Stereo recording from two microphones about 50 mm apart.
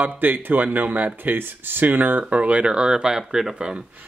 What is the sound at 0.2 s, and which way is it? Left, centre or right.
Speech, right.